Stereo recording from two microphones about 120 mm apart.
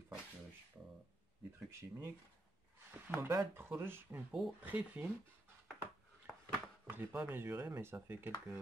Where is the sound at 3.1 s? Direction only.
20° right (ahead or behind).